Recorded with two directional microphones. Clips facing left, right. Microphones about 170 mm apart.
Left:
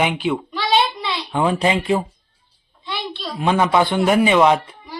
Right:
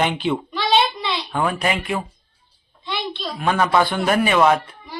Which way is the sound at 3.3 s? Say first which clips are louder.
Left 2 dB; 20° left (ahead or behind).